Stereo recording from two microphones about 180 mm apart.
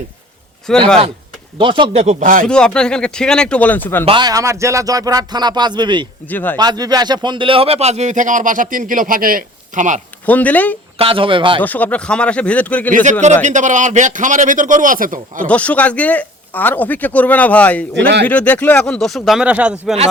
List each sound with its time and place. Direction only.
0.7 s speech: 5° left (ahead or behind)
1.5 s speech: 25° right (ahead or behind); by 2.4 s 45° right (ahead or behind)
2.5 s speech: 5° left (ahead or behind)
4.0 s speech: 25° right (ahead or behind)
6.2 s speech: 10° left (ahead or behind)
6.6 s speech: 20° right (ahead or behind); by 10.0 s 45° right (ahead or behind)
10.2 s speech: 10° left (ahead or behind)
10.9 s speech: 30° right (ahead or behind)
11.6 s speech: 10° left (ahead or behind)
12.9 s a man's voice: 45° right (ahead or behind)
15.4 s speech: 5° left (ahead or behind); by 19.8 s 10° right (ahead or behind)